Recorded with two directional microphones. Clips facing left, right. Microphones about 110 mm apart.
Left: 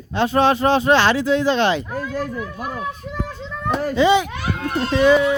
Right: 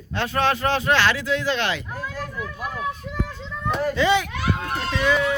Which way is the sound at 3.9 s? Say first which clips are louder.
Left 7 dB; 20° left (ahead or behind).